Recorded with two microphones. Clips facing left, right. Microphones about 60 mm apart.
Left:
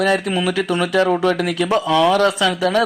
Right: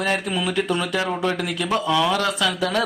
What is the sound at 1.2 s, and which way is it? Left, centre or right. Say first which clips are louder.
Speech: left 6 dB; left.